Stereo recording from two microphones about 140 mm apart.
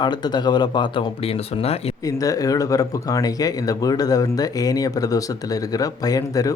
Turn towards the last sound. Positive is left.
turn(degrees=25)  # may be behind; listen again after turning